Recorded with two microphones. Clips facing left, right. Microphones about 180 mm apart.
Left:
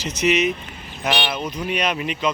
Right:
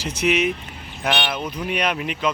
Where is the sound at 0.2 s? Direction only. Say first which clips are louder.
Left 1 dB; 55° right (ahead or behind).